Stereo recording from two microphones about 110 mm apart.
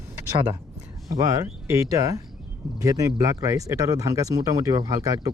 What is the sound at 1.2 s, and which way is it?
A man's voice, 30° right (ahead or behind).